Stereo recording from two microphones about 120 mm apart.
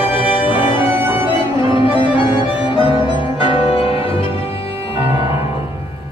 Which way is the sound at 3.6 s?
50° left (ahead or behind).